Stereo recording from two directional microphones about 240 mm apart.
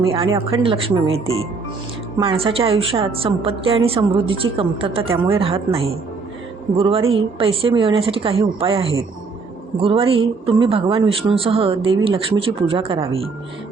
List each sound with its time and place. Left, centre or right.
0.0 s speech: right